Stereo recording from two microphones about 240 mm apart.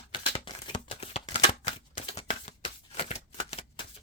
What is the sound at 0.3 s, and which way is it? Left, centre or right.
Shuffling cards, left.